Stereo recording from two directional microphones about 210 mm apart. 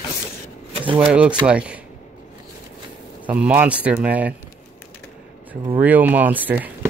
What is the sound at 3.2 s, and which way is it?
Speech, 5° right (ahead or behind).